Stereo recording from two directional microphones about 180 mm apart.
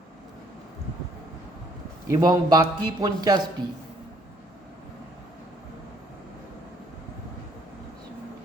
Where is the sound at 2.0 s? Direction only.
20° right (ahead or behind).